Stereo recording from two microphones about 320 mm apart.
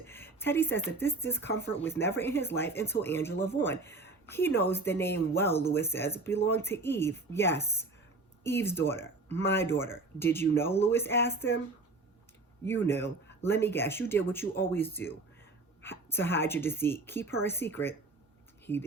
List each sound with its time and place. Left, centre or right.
0.1 s a sound: centre
0.9 s speech: centre
5.0 s speech: left
5.4 s speech: centre
12.6 s speech: centre